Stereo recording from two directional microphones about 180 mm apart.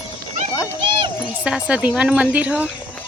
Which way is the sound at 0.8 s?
25° right (ahead or behind).